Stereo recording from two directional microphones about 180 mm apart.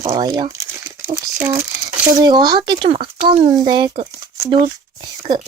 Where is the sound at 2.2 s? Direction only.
25° right (ahead or behind).